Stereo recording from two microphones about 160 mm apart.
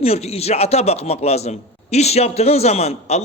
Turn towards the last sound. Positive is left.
turn(degrees=40)  # may be behind; listen again after turning